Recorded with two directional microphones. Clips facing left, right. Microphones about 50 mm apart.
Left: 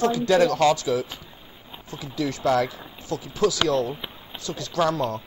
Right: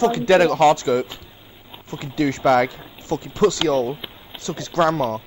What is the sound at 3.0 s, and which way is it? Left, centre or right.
Speech, right.